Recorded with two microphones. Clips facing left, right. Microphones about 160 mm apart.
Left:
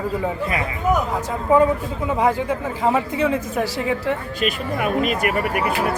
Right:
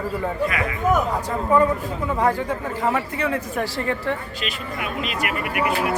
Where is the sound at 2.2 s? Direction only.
15° left (ahead or behind).